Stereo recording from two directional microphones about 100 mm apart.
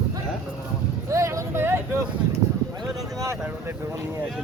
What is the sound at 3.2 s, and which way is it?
Speech, 30° right (ahead or behind).